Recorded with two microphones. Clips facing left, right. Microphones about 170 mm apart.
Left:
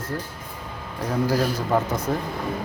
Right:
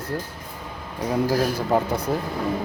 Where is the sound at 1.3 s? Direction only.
10° right (ahead or behind).